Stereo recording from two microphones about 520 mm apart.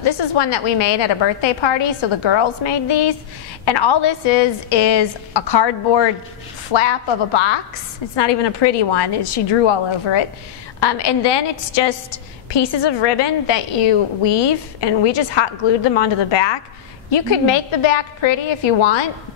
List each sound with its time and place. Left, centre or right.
0.0 s a woman's voice: left